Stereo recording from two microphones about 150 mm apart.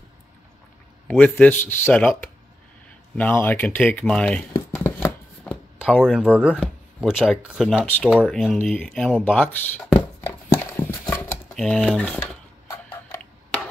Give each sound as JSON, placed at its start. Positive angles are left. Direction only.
{"t": 1.0, "sound": "speech", "side_deg": 10}
{"t": 3.2, "sound": "speech", "side_deg": 10}
{"t": 4.6, "sound": "chopping", "side_deg": 15}
{"t": 5.8, "sound": "speech", "side_deg": -5}
{"t": 9.2, "sound": "speech", "side_deg": 10}
{"t": 10.2, "sound": "horse", "side_deg": 15}
{"t": 11.5, "sound": "speech", "side_deg": 5}
{"t": 12.2, "sound": "a sound", "side_deg": 20}